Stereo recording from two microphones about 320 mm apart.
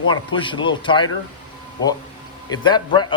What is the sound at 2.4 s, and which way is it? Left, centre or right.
Speech, centre.